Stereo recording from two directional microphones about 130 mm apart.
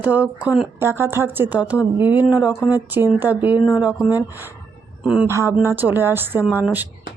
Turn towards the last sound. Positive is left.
turn(degrees=-15)  # may be behind; listen again after turning